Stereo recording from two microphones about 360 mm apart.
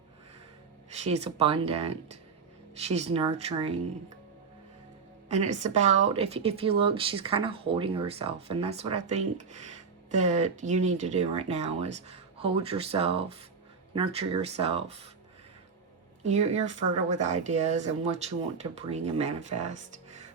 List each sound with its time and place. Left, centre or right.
1.0 s speech: centre
5.3 s speech: centre
16.2 s speech: centre